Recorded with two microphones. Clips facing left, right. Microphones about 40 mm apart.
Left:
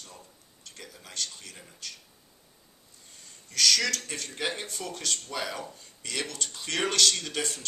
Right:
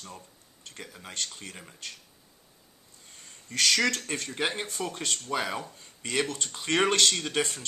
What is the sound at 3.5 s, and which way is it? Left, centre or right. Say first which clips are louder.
Speech: right 1 dB; right.